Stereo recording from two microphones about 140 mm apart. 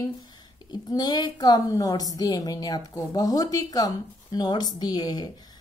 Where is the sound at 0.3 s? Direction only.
30° left (ahead or behind).